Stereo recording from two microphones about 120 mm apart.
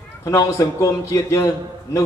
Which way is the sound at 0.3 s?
30° left (ahead or behind).